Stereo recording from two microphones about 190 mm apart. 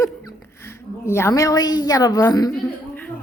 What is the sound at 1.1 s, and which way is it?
A woman's voice, 15° left (ahead or behind).